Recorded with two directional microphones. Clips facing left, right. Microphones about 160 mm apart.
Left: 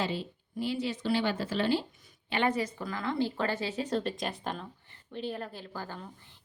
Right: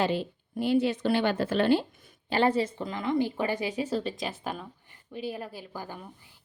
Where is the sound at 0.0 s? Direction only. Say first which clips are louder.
Right 6 dB; 55° right (ahead or behind).